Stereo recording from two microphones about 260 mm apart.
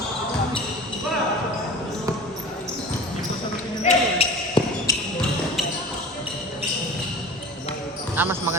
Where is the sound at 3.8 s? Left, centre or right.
Left.